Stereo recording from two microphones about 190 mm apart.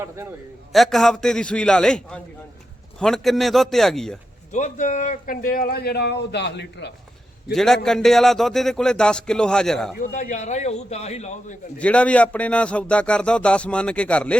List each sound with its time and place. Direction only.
0.7 s a man's voice: centre (ahead or behind)
4.5 s speech: 40° left (ahead or behind); by 6.9 s 65° left (ahead or behind)
7.5 s a man's voice: centre (ahead or behind)
10.0 s a man's voice: 40° left (ahead or behind)
11.8 s a man's voice: 5° left (ahead or behind)